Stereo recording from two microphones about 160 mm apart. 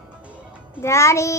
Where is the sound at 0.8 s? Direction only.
15° left (ahead or behind).